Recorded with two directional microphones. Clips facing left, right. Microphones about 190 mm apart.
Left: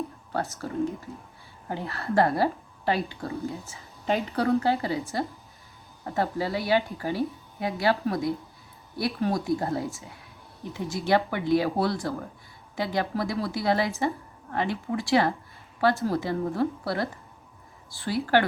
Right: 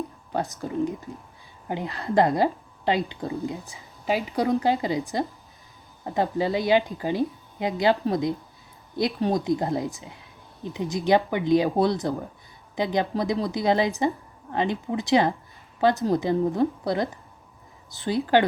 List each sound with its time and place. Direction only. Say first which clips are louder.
0.3 s speech: right 2 dB; 15° right (ahead or behind)